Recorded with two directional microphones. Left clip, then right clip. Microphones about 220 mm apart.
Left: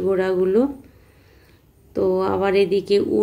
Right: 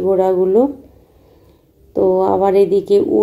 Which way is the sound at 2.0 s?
30° left (ahead or behind).